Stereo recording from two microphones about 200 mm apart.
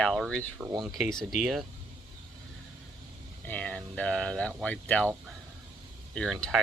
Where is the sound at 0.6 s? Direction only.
20° right (ahead or behind).